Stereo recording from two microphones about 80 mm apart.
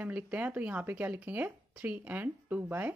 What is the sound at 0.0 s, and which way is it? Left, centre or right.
Speech, centre.